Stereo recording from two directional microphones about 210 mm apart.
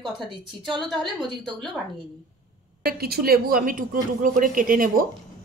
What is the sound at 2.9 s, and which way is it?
Speech, 45° right (ahead or behind).